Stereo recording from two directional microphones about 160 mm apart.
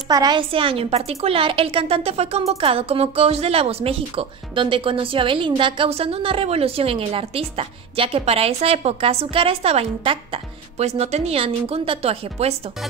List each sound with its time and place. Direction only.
0.1 s a woman's voice: 25° right (ahead or behind)